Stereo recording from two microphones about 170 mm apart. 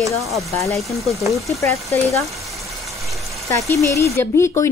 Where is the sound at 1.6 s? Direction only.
15° left (ahead or behind).